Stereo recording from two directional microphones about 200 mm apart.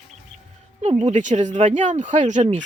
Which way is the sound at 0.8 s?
35° right (ahead or behind).